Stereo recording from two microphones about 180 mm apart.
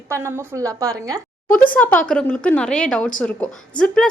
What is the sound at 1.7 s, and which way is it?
A woman's voice, 10° left (ahead or behind).